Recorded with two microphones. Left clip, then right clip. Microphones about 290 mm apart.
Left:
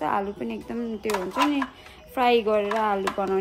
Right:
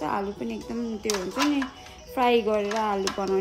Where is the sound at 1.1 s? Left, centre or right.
Left.